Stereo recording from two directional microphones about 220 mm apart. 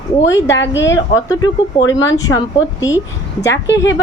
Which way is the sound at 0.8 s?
55° left (ahead or behind).